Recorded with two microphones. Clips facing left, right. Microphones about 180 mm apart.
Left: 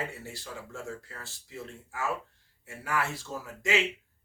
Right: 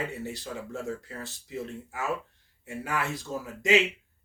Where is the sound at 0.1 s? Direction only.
20° right (ahead or behind).